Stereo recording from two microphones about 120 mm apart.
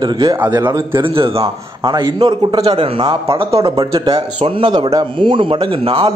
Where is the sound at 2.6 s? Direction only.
50° right (ahead or behind).